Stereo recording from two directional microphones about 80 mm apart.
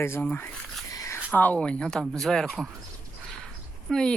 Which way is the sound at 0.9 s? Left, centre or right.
Left.